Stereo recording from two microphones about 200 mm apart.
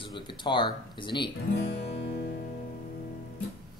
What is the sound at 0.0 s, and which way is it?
A man's voice, 25° left (ahead or behind).